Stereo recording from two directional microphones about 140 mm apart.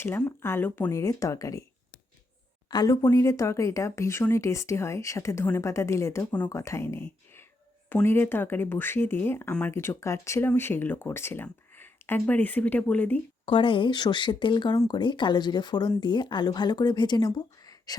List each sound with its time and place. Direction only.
0.0 s speech: 15° left (ahead or behind)
2.6 s speech: 30° left (ahead or behind); by 13.1 s 10° left (ahead or behind)
13.4 s speech: 40° left (ahead or behind)